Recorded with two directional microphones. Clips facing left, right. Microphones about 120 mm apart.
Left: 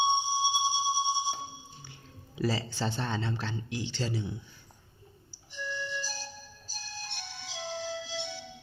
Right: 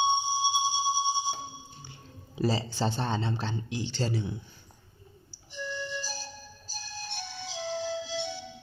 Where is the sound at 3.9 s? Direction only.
50° right (ahead or behind).